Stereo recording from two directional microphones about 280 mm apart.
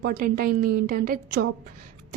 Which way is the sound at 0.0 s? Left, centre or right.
Right.